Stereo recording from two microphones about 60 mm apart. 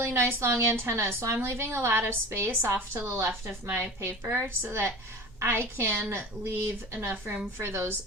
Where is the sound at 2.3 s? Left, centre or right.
Right.